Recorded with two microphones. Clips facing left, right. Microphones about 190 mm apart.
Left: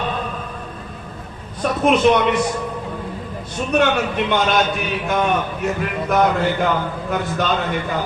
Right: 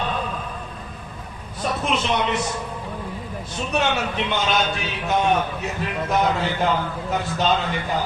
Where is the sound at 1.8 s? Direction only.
55° left (ahead or behind).